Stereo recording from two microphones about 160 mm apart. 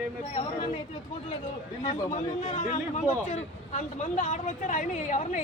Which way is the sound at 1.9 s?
50° left (ahead or behind).